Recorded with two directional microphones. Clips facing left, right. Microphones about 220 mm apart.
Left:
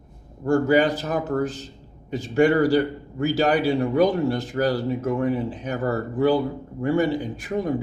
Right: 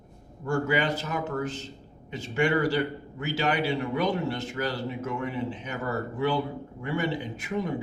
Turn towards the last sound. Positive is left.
turn(degrees=40)  # may be behind; listen again after turning